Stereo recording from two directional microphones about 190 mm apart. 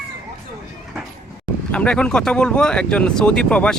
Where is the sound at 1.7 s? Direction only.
5° left (ahead or behind).